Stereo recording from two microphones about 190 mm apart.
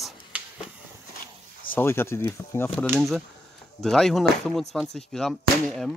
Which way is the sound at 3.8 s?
Centre (ahead or behind).